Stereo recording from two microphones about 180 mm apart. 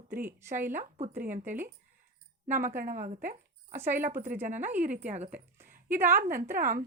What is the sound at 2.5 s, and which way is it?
Speech, 45° right (ahead or behind).